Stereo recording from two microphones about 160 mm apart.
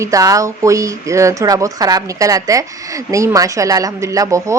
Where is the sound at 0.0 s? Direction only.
20° right (ahead or behind).